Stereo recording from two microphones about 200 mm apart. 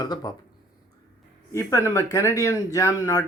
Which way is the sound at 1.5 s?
15° left (ahead or behind).